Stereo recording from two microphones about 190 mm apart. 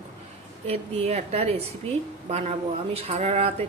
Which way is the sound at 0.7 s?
35° right (ahead or behind).